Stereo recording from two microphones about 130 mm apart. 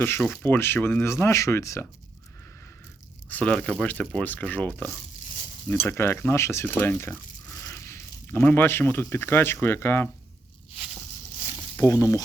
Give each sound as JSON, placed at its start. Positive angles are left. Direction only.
{"t": 0.0, "sound": "speech", "side_deg": 15}
{"t": 3.2, "sound": "speech", "side_deg": 10}
{"t": 11.8, "sound": "speech", "side_deg": 25}